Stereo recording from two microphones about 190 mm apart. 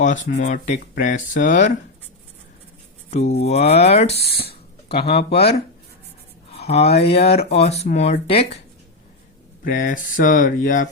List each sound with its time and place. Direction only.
0.0 s speech: 40° left (ahead or behind)
3.1 s mantra: 35° left (ahead or behind)
3.4 s speech: 35° left (ahead or behind)
5.1 s speech: 60° left (ahead or behind)
6.5 s a sound: 35° left (ahead or behind)
7.0 s speech: 35° left (ahead or behind)
9.6 s speech: 45° left (ahead or behind)